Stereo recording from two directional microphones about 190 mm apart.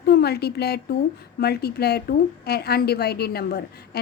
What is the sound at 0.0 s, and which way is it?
A woman's voice, 55° left (ahead or behind).